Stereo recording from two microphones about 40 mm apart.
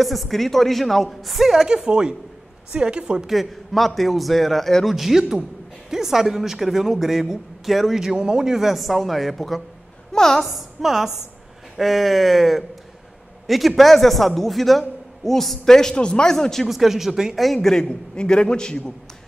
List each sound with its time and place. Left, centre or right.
0.0 s a man's voice: centre
1.7 s a woman's voice: centre
3.3 s a man's voice: centre
4.9 s a man's voice: centre
10.4 s a man's voice: centre
16.6 s speech: centre
17.6 s a man's voice: centre